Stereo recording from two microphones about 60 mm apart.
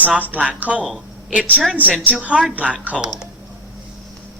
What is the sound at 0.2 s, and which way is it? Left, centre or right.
Speech, right.